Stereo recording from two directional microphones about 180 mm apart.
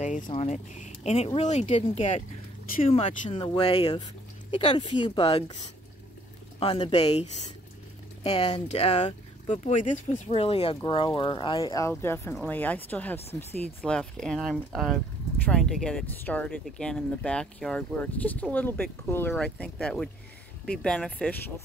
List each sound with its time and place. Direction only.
0.3 s speech: 35° left (ahead or behind)
6.6 s speech: 30° left (ahead or behind); by 13.2 s 10° left (ahead or behind)
13.2 s speech: 35° left (ahead or behind)
13.7 s speech: 5° left (ahead or behind)